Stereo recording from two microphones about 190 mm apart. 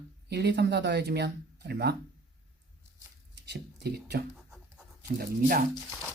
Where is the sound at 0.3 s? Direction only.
60° right (ahead or behind).